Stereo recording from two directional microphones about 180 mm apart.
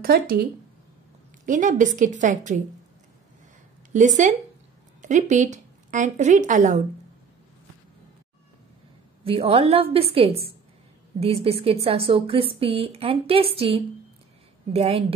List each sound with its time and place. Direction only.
0.0 s a woman's voice: 55° right (ahead or behind)
3.9 s a woman's voice: 45° right (ahead or behind)
9.2 s speech: 30° right (ahead or behind)